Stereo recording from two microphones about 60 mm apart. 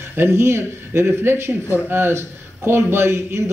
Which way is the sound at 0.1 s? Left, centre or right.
Right.